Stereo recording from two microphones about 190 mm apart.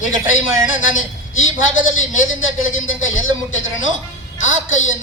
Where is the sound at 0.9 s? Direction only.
90° left.